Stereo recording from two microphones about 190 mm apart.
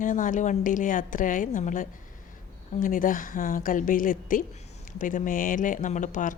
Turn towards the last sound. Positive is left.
turn(degrees=40)  # may be behind; listen again after turning